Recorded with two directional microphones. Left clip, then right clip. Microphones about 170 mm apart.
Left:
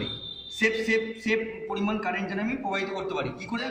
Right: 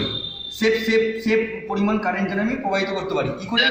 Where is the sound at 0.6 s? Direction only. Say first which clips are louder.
Right 6 dB; 10° right (ahead or behind).